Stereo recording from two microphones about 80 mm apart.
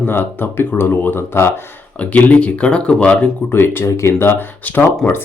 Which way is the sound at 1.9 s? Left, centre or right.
Centre.